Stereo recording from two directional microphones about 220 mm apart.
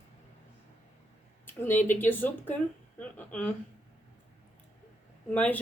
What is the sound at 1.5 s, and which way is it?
A woman's voice, 10° left (ahead or behind).